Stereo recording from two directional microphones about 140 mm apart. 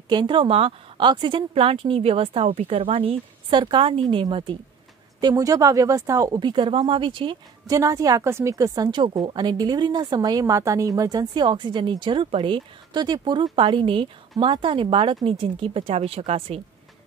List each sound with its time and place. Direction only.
0.1 s a woman's voice: 35° right (ahead or behind)
5.2 s a woman's voice: 25° right (ahead or behind)
7.7 s a woman's voice: 25° right (ahead or behind); by 16.6 s 45° right (ahead or behind)